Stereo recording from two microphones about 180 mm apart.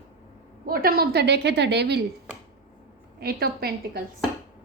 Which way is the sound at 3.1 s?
60° right (ahead or behind).